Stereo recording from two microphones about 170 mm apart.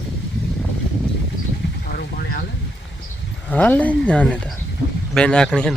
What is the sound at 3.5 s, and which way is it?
Speech, 10° left (ahead or behind).